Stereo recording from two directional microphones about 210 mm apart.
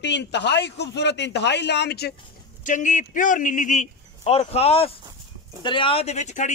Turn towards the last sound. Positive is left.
turn(degrees=35)  # may be behind; listen again after turning